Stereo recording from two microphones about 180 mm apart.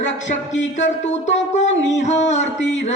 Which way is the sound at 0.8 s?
40° left (ahead or behind).